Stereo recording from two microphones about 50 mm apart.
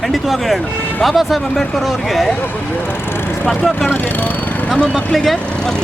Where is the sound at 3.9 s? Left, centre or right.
Left.